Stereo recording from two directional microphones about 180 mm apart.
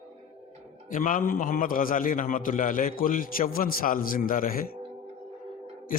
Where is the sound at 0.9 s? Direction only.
45° left (ahead or behind).